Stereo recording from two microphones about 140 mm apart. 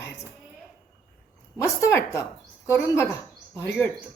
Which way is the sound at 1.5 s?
20° left (ahead or behind).